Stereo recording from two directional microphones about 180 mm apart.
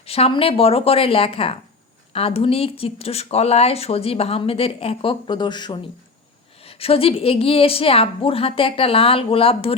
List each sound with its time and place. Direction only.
0.0 s speech: 35° left (ahead or behind)